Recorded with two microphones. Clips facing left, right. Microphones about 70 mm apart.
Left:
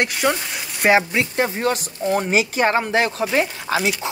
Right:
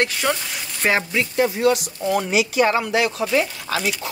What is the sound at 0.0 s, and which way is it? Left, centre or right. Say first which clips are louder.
Speech: left 1 dB; centre.